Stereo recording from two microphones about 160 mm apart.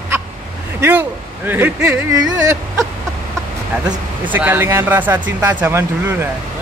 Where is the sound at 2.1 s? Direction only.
20° right (ahead or behind).